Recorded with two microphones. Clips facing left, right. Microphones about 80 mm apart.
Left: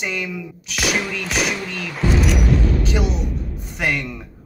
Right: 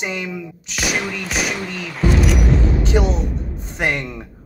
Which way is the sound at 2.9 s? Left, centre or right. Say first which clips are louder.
Right 3 dB; right.